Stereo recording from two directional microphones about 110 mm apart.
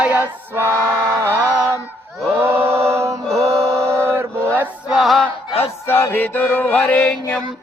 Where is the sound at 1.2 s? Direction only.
25° right (ahead or behind).